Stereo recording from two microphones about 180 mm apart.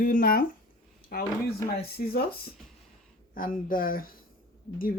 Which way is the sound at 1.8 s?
60° left (ahead or behind).